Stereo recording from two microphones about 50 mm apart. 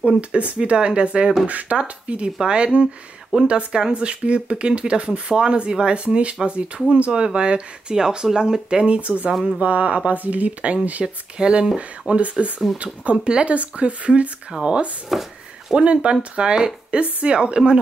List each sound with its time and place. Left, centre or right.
0.2 s speech: right
15.1 s speech: centre
15.7 s speech: right